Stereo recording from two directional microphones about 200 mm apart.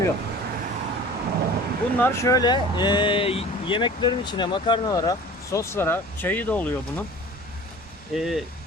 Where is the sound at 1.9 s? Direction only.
10° left (ahead or behind).